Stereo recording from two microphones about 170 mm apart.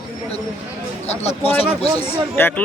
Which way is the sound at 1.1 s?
40° left (ahead or behind).